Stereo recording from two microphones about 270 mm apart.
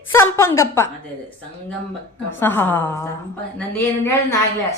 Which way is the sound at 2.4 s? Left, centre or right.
Centre.